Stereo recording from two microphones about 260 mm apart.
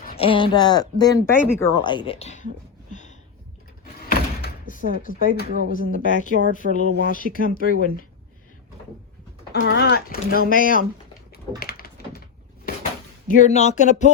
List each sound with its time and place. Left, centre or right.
0.2 s speech: centre
2.9 s a sound: left
4.4 s door: left
4.8 s speech: right
5.0 s speech: left
6.6 s speech: right
7.1 s speech: left
9.5 s speech: left
11.3 s typing: left
12.7 s a sound: left